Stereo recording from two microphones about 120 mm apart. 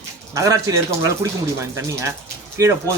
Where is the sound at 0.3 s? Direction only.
25° right (ahead or behind).